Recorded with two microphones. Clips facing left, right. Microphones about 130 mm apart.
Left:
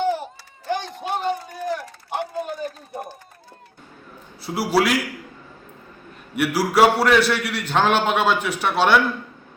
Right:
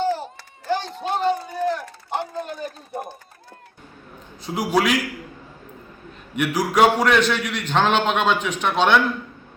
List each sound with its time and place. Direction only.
0.0 s a sound: 15° left (ahead or behind)
4.4 s a man's voice: 5° left (ahead or behind)
6.3 s a man's voice: 10° left (ahead or behind)